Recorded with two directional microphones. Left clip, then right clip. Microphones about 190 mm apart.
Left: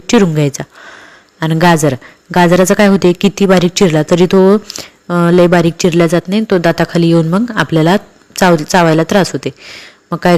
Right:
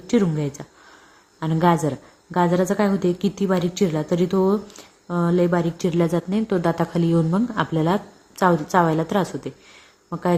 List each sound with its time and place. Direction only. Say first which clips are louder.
0.1 s a woman's voice: left 11 dB; 25° left (ahead or behind)